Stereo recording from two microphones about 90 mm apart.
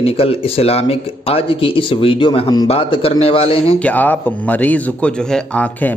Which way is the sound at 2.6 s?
90° left.